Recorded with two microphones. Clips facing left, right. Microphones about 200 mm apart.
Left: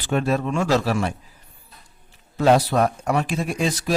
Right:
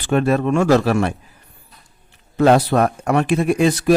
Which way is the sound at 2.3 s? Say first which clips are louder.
Right 4 dB; 60° right (ahead or behind).